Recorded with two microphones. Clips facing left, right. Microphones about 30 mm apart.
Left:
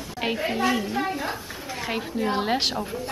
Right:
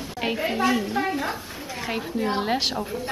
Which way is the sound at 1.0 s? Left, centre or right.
Centre.